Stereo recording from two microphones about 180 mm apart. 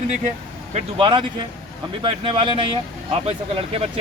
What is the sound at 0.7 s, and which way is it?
Speech, 35° right (ahead or behind).